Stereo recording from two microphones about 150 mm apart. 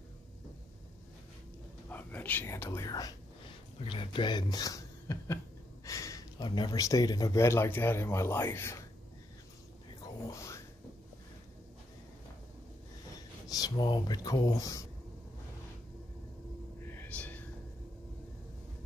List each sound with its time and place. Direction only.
1.9 s speech: 10° left (ahead or behind)
10.2 s a sound: 20° left (ahead or behind)
13.5 s speech: 25° left (ahead or behind)
16.9 s whispering: 10° left (ahead or behind)